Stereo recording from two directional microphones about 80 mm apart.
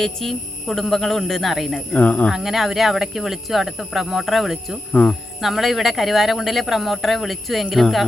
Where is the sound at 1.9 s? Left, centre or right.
Centre.